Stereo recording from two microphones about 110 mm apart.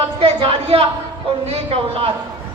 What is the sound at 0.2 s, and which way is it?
A woman's voice, 55° right (ahead or behind).